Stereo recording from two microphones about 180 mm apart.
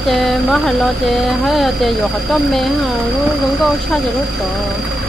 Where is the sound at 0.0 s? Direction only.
Centre (ahead or behind).